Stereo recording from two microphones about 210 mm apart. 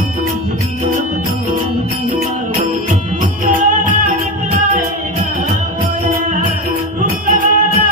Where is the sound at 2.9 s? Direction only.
40° right (ahead or behind).